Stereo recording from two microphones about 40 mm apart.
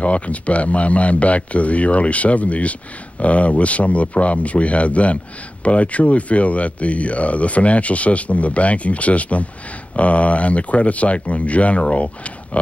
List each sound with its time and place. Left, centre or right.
0.0 s speech: left